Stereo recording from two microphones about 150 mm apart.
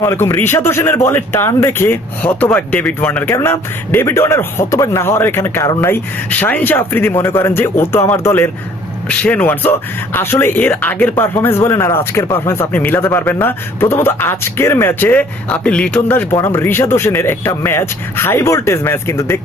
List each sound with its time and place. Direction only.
0.0 s speech: 20° left (ahead or behind)